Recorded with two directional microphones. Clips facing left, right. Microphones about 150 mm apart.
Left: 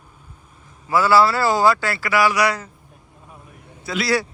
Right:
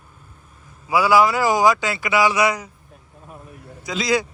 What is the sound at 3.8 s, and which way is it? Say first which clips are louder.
Speech: even; 15° right (ahead or behind).